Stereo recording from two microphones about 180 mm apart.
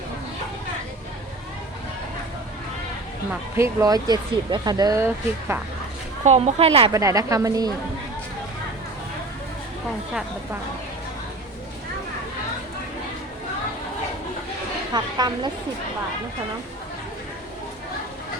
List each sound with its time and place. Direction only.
3.6 s speech: 20° right (ahead or behind)
6.2 s a woman's voice: 35° right (ahead or behind)
6.9 s speech: 20° right (ahead or behind)
14.9 s speech: 25° right (ahead or behind)